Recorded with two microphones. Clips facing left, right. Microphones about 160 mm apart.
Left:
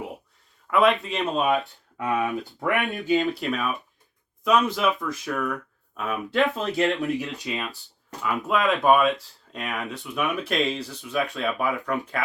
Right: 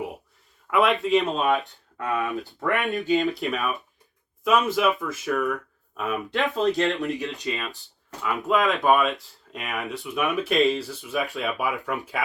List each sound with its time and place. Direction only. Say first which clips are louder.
0.7 s speech: right 1 dB; centre (ahead or behind)
2.0 s speech: left 1 dB; 20° left (ahead or behind)
2.8 s speech: right 2 dB; centre (ahead or behind)